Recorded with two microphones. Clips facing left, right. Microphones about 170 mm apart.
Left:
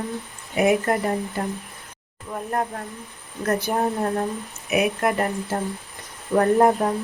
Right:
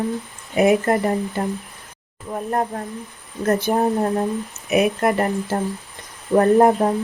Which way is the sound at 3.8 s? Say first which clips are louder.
Right 4 dB; 20° right (ahead or behind).